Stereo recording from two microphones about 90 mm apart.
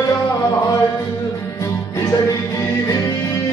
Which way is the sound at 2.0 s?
45° left (ahead or behind).